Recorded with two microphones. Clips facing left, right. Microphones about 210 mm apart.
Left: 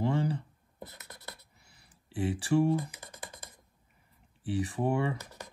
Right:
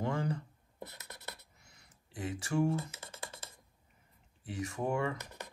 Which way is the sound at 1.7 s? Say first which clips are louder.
Left 6 dB; 30° left (ahead or behind).